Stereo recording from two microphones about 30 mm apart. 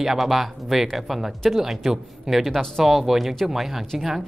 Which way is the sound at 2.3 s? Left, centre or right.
Centre.